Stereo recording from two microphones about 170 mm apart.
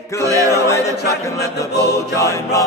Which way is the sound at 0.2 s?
20° right (ahead or behind).